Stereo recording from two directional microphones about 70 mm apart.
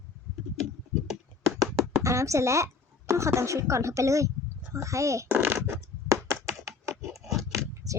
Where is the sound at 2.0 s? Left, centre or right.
Right.